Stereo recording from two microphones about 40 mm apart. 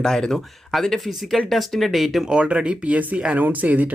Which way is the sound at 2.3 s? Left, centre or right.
Right.